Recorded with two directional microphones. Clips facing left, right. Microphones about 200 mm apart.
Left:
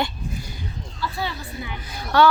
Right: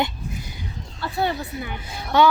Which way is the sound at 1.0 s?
55° right (ahead or behind).